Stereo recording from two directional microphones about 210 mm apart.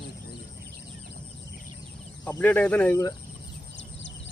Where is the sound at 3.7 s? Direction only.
60° left (ahead or behind).